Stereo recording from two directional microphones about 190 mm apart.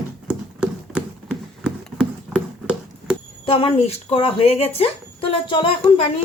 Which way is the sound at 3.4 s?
30° left (ahead or behind).